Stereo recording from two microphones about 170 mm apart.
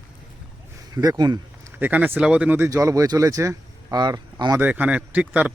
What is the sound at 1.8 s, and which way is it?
Speech, 10° right (ahead or behind).